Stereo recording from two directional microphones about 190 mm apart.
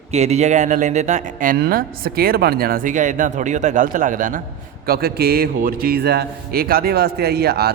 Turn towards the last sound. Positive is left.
turn(degrees=-55)  # may be behind; listen again after turning